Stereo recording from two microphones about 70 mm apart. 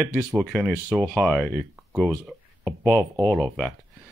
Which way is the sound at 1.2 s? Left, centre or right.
Centre.